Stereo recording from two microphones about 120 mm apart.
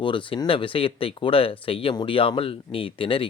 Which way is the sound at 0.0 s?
45° left (ahead or behind).